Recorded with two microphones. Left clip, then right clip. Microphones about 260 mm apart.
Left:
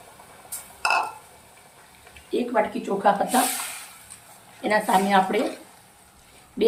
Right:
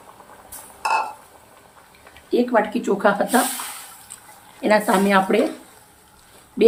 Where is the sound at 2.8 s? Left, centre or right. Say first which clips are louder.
Right 2 dB; centre.